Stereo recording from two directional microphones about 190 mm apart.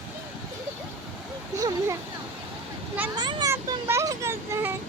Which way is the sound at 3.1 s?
20° right (ahead or behind).